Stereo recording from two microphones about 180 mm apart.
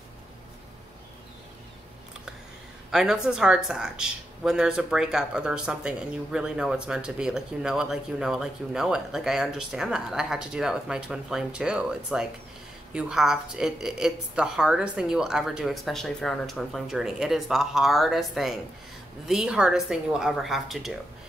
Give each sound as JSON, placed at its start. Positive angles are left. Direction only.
{"t": 2.9, "sound": "speech", "side_deg": -5}